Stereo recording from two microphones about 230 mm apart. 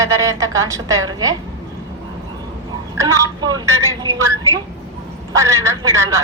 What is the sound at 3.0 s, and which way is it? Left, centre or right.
A woman's voice, centre.